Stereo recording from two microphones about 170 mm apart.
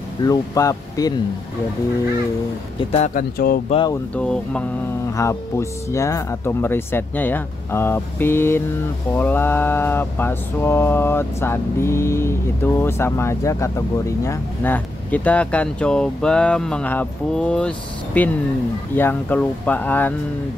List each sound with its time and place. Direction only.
0.2 s speech: 20° left (ahead or behind)
3.2 s speech: 55° left (ahead or behind)
4.1 s mantra: 5° left (ahead or behind)
5.1 s mantra: 15° left (ahead or behind)